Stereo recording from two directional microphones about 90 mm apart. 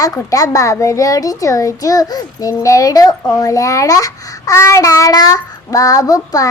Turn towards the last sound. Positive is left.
turn(degrees=40)  # may be behind; listen again after turning